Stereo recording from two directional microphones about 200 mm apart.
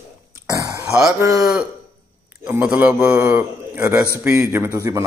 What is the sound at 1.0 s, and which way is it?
Speech, centre (ahead or behind).